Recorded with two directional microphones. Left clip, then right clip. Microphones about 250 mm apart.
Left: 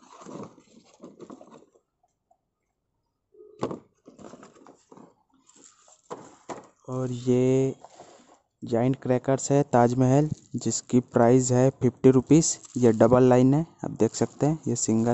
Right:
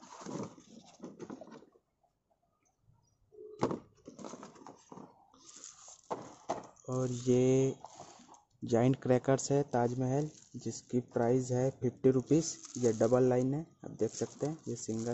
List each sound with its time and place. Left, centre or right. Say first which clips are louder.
1.1 s a sound: left 2 dB; centre
3.5 s door: left 3 dB; centre
4.2 s a sound: left 1 dB; centre
4.9 s dog: left 2 dB; centre
6.0 s horse: even; left
6.9 s speech: left 5 dB; centre